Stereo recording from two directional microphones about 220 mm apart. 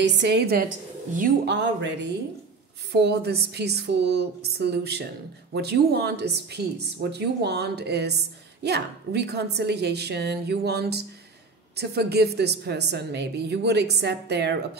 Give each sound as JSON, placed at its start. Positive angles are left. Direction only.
{"t": 0.0, "sound": "a woman's voice", "side_deg": -50}